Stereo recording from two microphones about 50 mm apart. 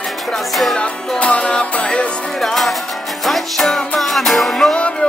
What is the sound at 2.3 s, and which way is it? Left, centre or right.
Music, centre.